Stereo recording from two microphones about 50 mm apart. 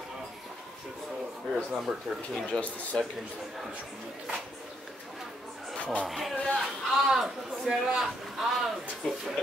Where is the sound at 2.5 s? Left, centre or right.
Centre.